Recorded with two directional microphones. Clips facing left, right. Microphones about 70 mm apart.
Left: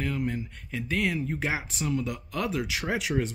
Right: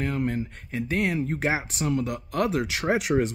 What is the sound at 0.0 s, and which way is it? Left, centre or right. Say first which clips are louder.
Speech: right 3 dB; right.